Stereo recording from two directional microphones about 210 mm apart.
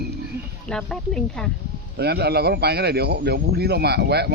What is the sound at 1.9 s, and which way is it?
A man's voice, 50° right (ahead or behind).